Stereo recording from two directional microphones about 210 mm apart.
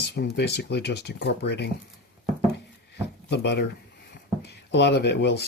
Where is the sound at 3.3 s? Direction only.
50° left (ahead or behind).